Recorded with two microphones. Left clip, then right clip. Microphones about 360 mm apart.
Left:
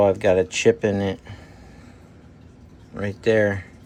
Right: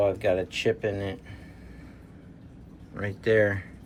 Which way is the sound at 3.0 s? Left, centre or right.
Centre.